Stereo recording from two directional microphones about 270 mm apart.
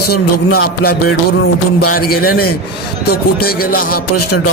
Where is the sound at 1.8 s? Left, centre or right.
Left.